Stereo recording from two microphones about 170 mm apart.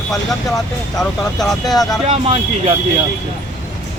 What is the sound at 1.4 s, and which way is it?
Speech, centre (ahead or behind).